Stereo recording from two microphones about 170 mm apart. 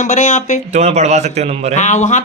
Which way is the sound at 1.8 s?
45° left (ahead or behind).